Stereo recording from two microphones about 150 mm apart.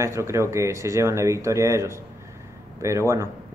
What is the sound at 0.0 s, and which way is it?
Speech, 20° right (ahead or behind).